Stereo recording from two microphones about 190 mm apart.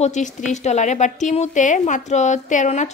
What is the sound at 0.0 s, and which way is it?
Speech, 40° left (ahead or behind).